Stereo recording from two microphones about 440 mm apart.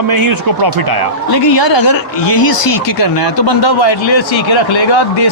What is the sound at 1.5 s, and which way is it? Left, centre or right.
Speech, left.